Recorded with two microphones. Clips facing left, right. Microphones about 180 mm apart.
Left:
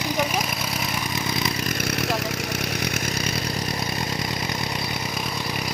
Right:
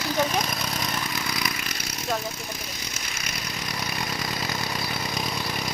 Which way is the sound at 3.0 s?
35° left (ahead or behind).